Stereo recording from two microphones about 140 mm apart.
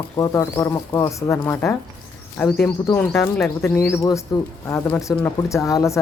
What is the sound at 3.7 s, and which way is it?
Speech, 20° left (ahead or behind).